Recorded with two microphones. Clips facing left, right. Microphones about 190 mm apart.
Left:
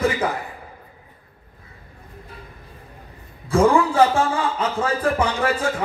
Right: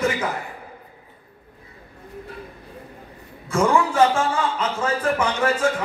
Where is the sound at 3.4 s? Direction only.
35° left (ahead or behind).